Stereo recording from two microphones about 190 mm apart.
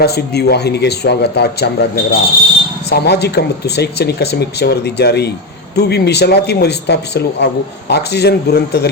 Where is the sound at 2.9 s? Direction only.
60° left (ahead or behind).